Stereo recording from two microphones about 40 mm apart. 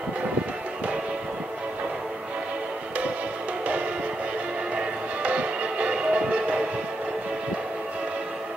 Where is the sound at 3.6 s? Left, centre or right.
Right.